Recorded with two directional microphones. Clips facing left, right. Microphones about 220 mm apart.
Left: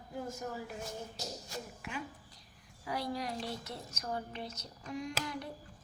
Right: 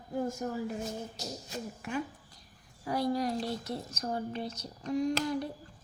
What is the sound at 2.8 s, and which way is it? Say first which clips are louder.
A woman's voice: right 7 dB; 45° right (ahead or behind).